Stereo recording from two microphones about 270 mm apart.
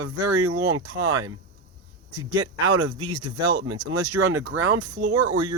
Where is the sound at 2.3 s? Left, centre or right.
Centre.